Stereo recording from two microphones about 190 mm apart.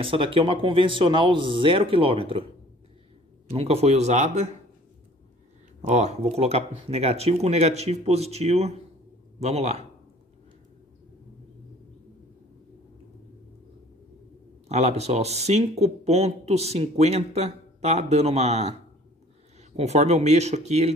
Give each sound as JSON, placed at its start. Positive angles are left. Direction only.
{"t": 0.0, "sound": "speech", "side_deg": -30}
{"t": 3.5, "sound": "speech", "side_deg": -35}
{"t": 5.8, "sound": "speech", "side_deg": -35}
{"t": 14.7, "sound": "speech", "side_deg": -35}
{"t": 19.8, "sound": "speech", "side_deg": -35}